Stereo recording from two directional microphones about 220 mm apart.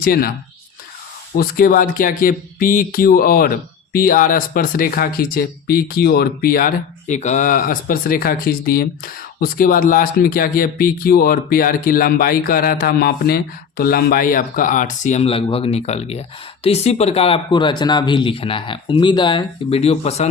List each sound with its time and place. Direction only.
0.0 s speech: 45° left (ahead or behind)
1.4 s speech: 40° left (ahead or behind)